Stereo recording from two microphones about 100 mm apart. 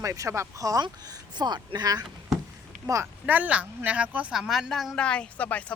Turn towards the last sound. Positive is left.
turn(degrees=15)  # may be behind; listen again after turning